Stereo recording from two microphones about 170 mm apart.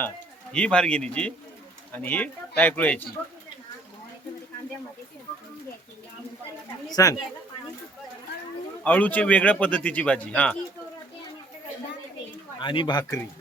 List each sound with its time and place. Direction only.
0.5 s speech: 5° left (ahead or behind)
6.9 s speech: 20° left (ahead or behind)
8.8 s speech: 10° left (ahead or behind)
12.5 s speech: 25° left (ahead or behind)